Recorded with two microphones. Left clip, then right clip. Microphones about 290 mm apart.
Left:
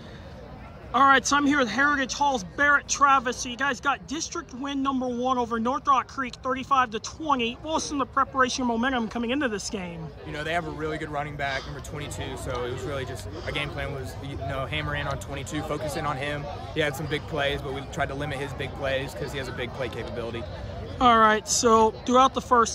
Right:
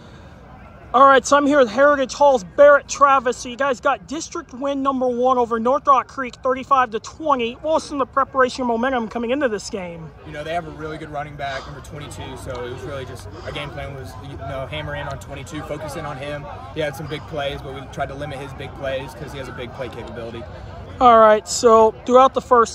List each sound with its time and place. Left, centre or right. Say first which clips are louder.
0.9 s speech: right 7 dB; centre
10.3 s speech: right 3 dB; centre
17.6 s speech: right 2 dB; left
18.0 s speech: right 2 dB; centre